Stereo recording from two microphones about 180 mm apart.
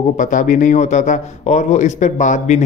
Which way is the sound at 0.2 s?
45° left (ahead or behind).